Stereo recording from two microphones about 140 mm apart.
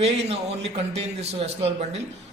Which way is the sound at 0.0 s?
45° right (ahead or behind).